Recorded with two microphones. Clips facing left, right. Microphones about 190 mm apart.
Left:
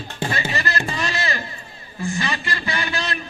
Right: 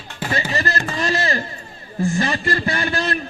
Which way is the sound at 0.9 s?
45° right (ahead or behind).